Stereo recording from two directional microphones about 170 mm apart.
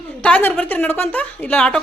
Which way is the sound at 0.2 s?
10° left (ahead or behind).